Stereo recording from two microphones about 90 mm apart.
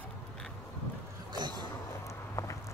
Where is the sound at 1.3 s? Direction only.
55° right (ahead or behind).